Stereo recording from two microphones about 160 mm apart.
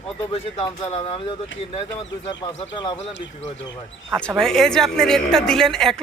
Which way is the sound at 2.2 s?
25° left (ahead or behind).